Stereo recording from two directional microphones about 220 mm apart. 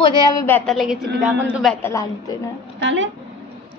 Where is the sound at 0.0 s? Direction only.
20° left (ahead or behind).